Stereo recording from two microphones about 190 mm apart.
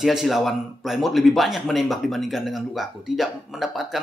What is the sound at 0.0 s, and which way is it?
A man's voice, centre (ahead or behind).